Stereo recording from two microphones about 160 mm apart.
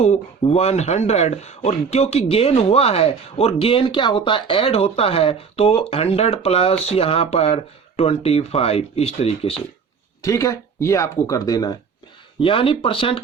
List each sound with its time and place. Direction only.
0.0 s speech: 45° left (ahead or behind)
10.2 s speech: 20° left (ahead or behind)
12.4 s speech: 35° left (ahead or behind)